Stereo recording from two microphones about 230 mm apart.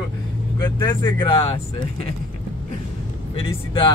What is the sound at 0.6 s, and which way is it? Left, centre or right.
Speech, centre.